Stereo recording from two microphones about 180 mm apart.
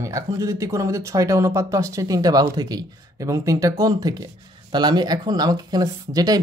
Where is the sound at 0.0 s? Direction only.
20° right (ahead or behind).